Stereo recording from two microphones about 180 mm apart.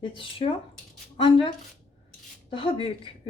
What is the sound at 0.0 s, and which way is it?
A woman's voice, 30° left (ahead or behind).